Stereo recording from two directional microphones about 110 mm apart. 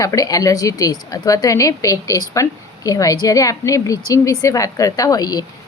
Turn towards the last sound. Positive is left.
turn(degrees=35)  # may be behind; listen again after turning